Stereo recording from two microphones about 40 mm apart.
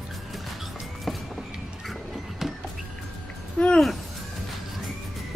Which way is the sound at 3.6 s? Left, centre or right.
Left.